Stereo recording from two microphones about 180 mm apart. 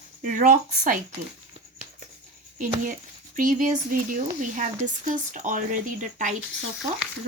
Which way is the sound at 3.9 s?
50° right (ahead or behind).